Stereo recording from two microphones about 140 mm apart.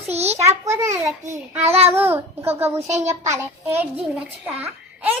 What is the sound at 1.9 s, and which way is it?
A child's voice, 15° right (ahead or behind).